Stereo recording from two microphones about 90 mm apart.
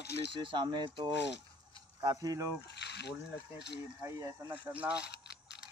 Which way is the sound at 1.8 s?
50° right (ahead or behind).